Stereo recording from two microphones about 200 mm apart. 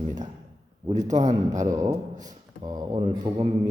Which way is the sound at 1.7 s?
15° right (ahead or behind).